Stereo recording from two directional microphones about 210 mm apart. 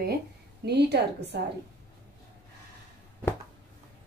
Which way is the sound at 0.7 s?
50° right (ahead or behind).